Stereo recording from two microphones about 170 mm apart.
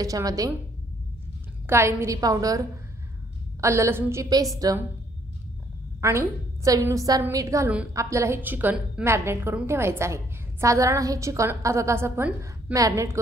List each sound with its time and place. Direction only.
0.0 s a woman's voice: 20° right (ahead or behind)
1.7 s a woman's voice: 15° right (ahead or behind)
3.6 s a woman's voice: 15° right (ahead or behind)
5.9 s a woman's voice: 15° right (ahead or behind)